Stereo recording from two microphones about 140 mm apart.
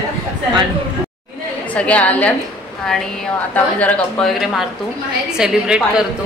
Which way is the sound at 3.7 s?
10° left (ahead or behind).